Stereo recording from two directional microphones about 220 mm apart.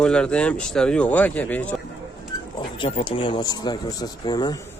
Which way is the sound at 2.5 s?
20° left (ahead or behind).